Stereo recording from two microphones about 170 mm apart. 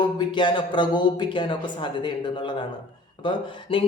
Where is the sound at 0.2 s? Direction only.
25° left (ahead or behind).